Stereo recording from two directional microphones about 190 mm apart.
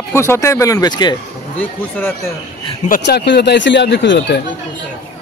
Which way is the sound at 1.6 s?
10° left (ahead or behind).